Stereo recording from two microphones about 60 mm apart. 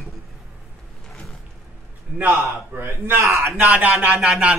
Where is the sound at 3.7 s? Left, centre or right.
Right.